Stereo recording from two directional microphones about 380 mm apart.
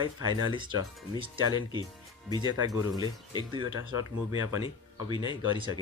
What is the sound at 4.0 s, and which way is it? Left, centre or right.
Speech, left.